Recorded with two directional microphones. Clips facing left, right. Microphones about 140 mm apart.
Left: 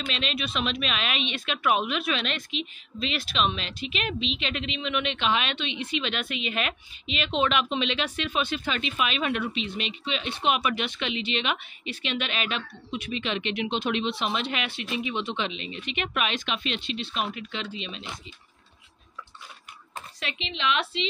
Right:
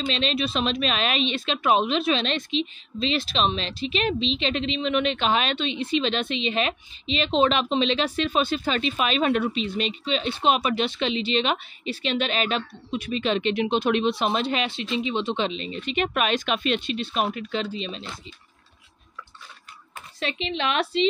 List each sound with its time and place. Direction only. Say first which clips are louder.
0.0 s speech: right 6 dB; 30° right (ahead or behind)
20.2 s speech: right 7 dB; 35° right (ahead or behind)